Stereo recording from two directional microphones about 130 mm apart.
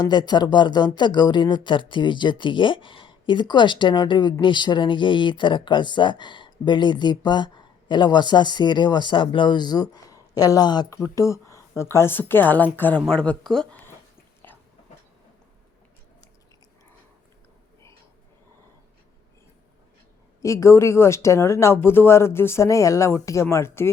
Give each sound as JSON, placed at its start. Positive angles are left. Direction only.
{"t": 0.0, "sound": "speech", "side_deg": 35}
{"t": 14.5, "sound": "a sound", "side_deg": 15}
{"t": 20.4, "sound": "speech", "side_deg": 25}